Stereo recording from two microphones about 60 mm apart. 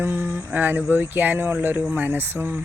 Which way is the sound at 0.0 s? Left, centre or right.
Right.